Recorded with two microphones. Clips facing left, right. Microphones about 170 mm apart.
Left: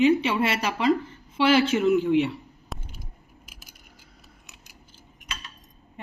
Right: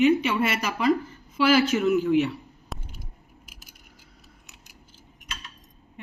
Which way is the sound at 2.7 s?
Centre (ahead or behind).